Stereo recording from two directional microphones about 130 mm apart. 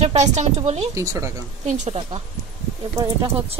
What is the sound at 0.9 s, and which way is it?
Speech, 25° right (ahead or behind).